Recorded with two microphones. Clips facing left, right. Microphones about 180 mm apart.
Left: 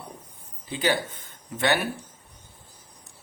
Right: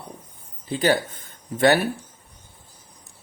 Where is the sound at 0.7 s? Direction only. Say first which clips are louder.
Right 5 dB; 45° right (ahead or behind).